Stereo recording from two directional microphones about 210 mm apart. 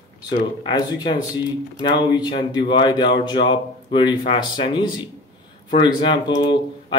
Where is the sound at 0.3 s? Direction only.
20° left (ahead or behind).